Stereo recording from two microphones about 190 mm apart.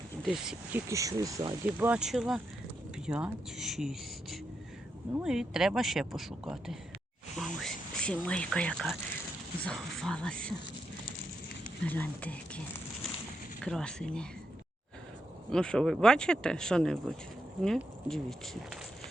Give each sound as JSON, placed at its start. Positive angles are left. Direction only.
{"t": 0.2, "sound": "speech", "side_deg": 0}
{"t": 0.9, "sound": "speech", "side_deg": -15}
{"t": 1.6, "sound": "speech", "side_deg": -10}
{"t": 11.8, "sound": "speech", "side_deg": 10}
{"t": 15.4, "sound": "speech", "side_deg": 5}